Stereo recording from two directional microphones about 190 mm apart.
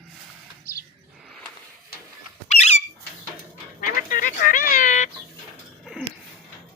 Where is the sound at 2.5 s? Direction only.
35° left (ahead or behind).